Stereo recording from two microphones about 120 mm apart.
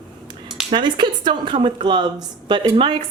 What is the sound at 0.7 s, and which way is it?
A woman's voice, 40° right (ahead or behind).